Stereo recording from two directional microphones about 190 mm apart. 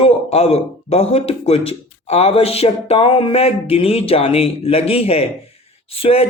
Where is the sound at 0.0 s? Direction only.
30° left (ahead or behind).